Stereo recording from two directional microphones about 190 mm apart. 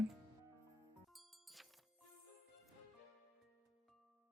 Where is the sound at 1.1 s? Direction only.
Centre (ahead or behind).